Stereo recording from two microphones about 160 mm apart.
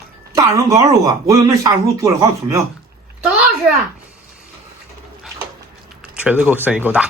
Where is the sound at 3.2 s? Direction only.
10° right (ahead or behind).